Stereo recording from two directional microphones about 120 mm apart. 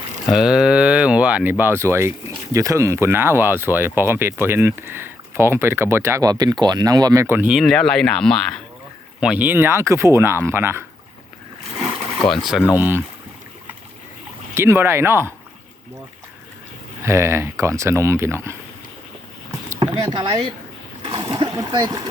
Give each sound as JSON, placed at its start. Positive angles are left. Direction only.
{"t": 0.3, "sound": "speech", "side_deg": -5}
{"t": 6.3, "sound": "speech", "side_deg": -35}
{"t": 7.6, "sound": "speech", "side_deg": 5}
{"t": 9.2, "sound": "speech", "side_deg": -15}
{"t": 12.5, "sound": "speech", "side_deg": 0}
{"t": 12.7, "sound": "speech", "side_deg": -15}
{"t": 14.5, "sound": "speech", "side_deg": -20}
{"t": 17.0, "sound": "speech", "side_deg": -20}
{"t": 19.8, "sound": "speech", "side_deg": -35}